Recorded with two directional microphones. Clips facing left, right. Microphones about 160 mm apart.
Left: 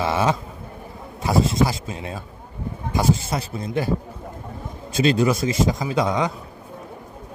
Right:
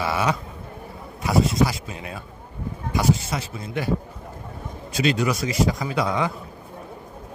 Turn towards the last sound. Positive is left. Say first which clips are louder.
# left 2 dB
turn(degrees=20)  # may be behind; listen again after turning